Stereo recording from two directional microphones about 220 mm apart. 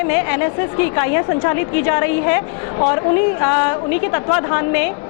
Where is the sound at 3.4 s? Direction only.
20° left (ahead or behind).